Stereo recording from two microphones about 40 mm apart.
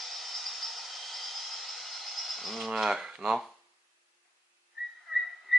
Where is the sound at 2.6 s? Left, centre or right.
Centre.